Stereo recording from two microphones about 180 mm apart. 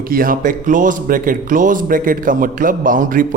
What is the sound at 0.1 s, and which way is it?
A man's voice, 50° right (ahead or behind).